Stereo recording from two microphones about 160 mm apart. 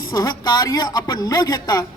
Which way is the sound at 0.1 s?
25° left (ahead or behind).